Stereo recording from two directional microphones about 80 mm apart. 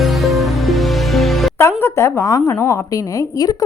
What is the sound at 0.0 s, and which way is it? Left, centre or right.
Music, centre.